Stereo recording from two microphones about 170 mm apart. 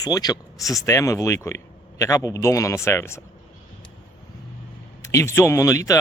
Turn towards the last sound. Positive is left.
turn(degrees=20)  # may be behind; listen again after turning